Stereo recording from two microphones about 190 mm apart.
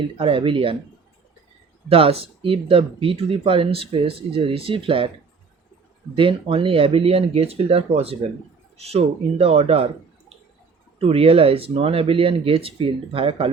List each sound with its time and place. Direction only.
0.2 s speech: 30° right (ahead or behind)
1.9 s speech: 30° right (ahead or behind)
6.1 s speech: 25° right (ahead or behind)